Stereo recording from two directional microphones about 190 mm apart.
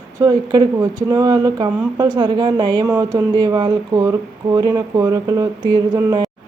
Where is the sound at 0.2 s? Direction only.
20° right (ahead or behind).